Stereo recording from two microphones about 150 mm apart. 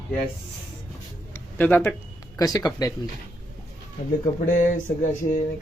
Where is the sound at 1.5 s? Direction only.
10° left (ahead or behind).